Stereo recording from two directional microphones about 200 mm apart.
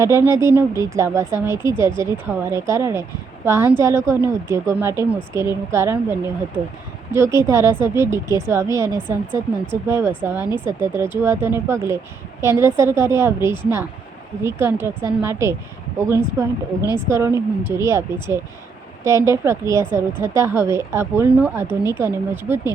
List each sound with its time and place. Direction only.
0.0 s a woman's voice: 15° right (ahead or behind)